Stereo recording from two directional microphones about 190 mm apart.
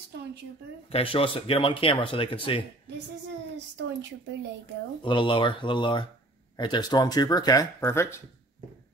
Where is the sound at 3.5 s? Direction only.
65° right (ahead or behind).